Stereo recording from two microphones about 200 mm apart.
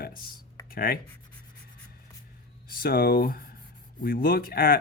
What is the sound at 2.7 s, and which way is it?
Speech, 50° left (ahead or behind).